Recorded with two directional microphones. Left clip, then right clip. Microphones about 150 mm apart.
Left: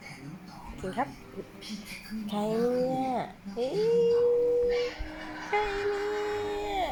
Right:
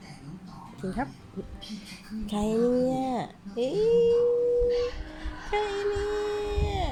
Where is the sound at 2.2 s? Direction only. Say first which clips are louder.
Right 2 dB; 45° right (ahead or behind).